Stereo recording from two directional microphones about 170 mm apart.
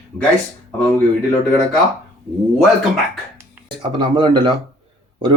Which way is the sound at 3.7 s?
25° right (ahead or behind).